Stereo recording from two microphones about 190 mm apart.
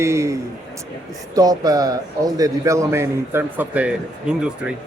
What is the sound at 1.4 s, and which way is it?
A man's voice, 20° right (ahead or behind).